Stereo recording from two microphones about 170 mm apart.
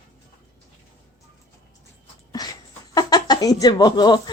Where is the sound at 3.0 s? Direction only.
25° left (ahead or behind).